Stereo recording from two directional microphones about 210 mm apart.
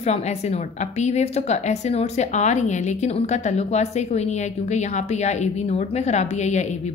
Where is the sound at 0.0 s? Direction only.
30° left (ahead or behind).